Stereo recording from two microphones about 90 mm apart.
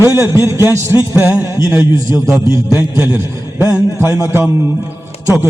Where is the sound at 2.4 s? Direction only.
40° left (ahead or behind).